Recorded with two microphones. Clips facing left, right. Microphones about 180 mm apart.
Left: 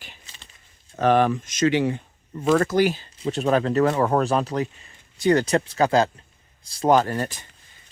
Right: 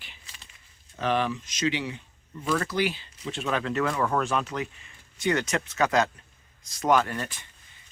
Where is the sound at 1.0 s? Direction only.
50° left (ahead or behind).